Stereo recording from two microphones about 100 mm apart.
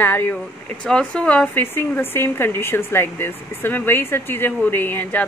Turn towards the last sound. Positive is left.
turn(degrees=20)  # may be behind; listen again after turning